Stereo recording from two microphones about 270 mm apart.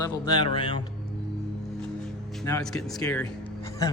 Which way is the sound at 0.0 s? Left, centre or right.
Centre.